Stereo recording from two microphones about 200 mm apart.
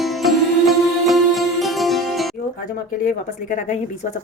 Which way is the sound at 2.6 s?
40° left (ahead or behind).